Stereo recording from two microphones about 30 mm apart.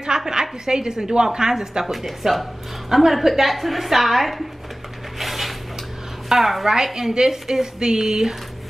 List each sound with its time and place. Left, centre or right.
0.0 s a woman's voice: right
1.9 s a woman's voice: centre
5.2 s a sound: centre
6.2 s a woman's voice: centre